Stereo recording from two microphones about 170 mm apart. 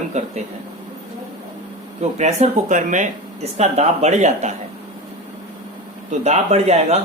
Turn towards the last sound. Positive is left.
turn(degrees=-40)  # may be behind; listen again after turning